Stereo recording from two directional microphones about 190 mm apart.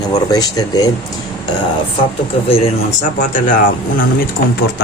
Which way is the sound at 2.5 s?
35° left (ahead or behind).